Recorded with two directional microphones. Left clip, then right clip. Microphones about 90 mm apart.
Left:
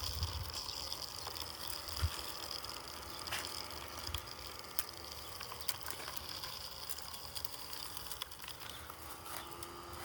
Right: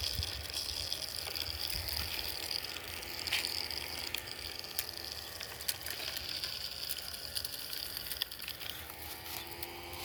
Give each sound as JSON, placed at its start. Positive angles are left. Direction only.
{"t": 0.0, "sound": "gush", "side_deg": 50}
{"t": 3.2, "sound": "ratchet", "side_deg": 30}
{"t": 5.6, "sound": "a sound", "side_deg": 55}